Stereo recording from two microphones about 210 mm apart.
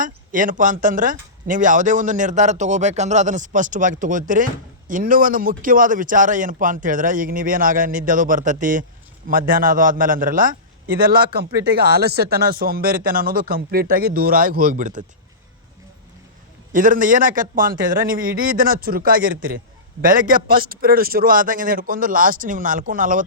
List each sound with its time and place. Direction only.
0.0 s speech: 40° right (ahead or behind)
16.7 s speech: 40° right (ahead or behind)